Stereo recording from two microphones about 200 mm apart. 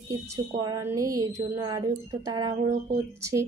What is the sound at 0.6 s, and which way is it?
Speech, 20° right (ahead or behind).